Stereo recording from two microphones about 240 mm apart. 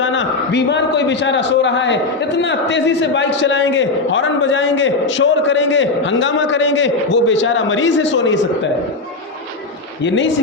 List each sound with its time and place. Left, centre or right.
0.0 s a man's voice: left
10.0 s a man's voice: left